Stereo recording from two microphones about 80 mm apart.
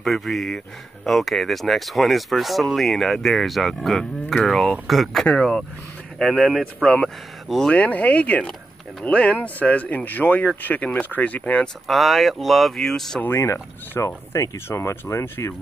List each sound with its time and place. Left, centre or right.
0.0 s speech: centre
5.2 s speech: centre
7.7 s speech: centre
11.9 s speech: centre
13.4 s speech: left